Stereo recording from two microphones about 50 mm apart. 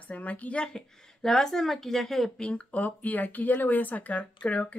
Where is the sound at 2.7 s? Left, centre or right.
Left.